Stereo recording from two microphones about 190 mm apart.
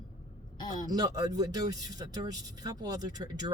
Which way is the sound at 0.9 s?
20° right (ahead or behind).